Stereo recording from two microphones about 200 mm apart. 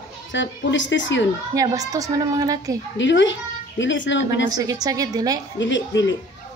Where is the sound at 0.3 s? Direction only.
65° left (ahead or behind).